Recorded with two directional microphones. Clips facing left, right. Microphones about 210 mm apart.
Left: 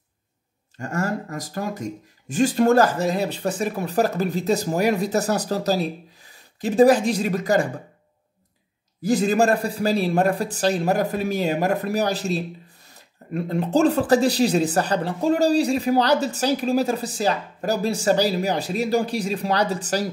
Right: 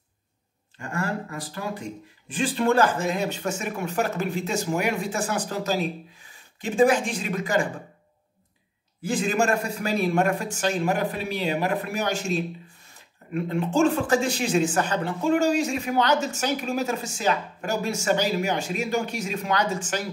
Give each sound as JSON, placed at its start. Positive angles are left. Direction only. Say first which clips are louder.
{"t": 0.7, "sound": "a man's voice", "louder": "left 3 dB", "side_deg": 40}
{"t": 9.0, "sound": "a man's voice", "louder": "left 5 dB", "side_deg": 40}